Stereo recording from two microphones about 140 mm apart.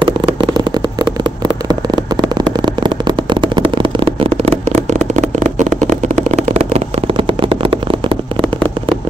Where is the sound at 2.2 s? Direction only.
30° right (ahead or behind).